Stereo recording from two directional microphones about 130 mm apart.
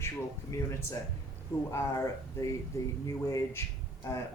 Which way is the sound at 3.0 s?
25° left (ahead or behind).